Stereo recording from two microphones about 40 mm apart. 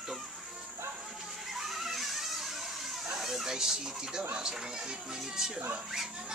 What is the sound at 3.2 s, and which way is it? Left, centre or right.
Speech, centre.